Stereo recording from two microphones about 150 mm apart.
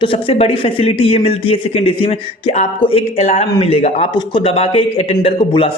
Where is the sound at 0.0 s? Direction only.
40° left (ahead or behind).